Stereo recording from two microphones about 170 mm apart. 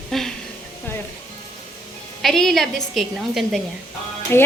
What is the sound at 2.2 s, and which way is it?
A woman's voice, centre (ahead or behind).